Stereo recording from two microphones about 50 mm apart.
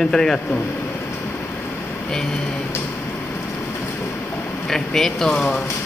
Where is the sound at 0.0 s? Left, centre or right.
Centre.